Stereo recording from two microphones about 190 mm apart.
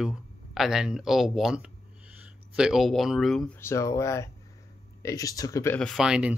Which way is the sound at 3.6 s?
15° left (ahead or behind).